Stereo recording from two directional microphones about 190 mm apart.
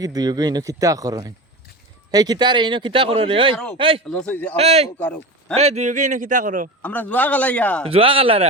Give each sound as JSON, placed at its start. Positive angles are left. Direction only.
{"t": 0.0, "sound": "speech", "side_deg": -20}
{"t": 4.1, "sound": "a man's voice", "side_deg": 5}
{"t": 4.5, "sound": "a man's voice", "side_deg": -35}
{"t": 4.9, "sound": "speech", "side_deg": 10}
{"t": 5.5, "sound": "a man's voice", "side_deg": -35}
{"t": 6.8, "sound": "a man's voice", "side_deg": 10}
{"t": 7.9, "sound": "speech", "side_deg": -30}